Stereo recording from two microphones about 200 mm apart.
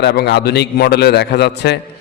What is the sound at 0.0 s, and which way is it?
A man's voice, 60° left (ahead or behind).